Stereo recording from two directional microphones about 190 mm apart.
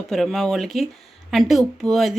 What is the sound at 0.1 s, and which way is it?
Speech, centre (ahead or behind).